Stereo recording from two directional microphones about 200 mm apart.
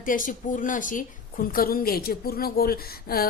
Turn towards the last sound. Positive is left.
turn(degrees=50)  # may be behind; listen again after turning